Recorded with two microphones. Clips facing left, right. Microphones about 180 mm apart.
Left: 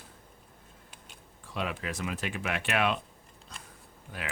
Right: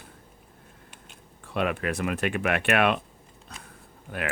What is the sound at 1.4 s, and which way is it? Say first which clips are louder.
Speech: right 7 dB; 60° right (ahead or behind).